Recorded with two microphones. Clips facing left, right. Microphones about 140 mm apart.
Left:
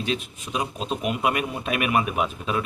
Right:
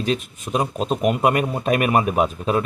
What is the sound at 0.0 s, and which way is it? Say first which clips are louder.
A man's voice: right 5 dB; 45° right (ahead or behind).